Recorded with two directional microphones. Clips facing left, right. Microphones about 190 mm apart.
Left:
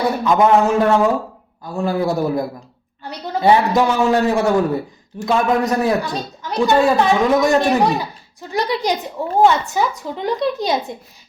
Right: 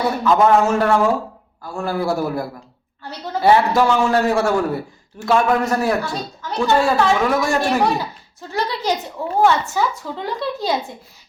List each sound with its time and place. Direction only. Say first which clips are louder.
0.3 s a woman's voice: even; 15° left (ahead or behind)